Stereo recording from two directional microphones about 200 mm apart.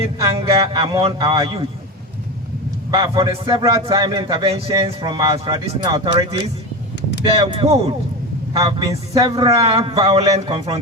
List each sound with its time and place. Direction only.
0.3 s a man's voice: 30° right (ahead or behind)
2.9 s a man's voice: 20° right (ahead or behind)
8.5 s a man's voice: 15° right (ahead or behind)